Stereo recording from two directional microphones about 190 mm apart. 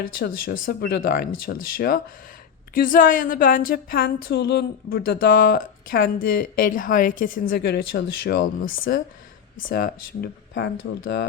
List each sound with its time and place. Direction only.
0.0 s a woman's voice: 50° left (ahead or behind)
10.5 s speech: 70° left (ahead or behind)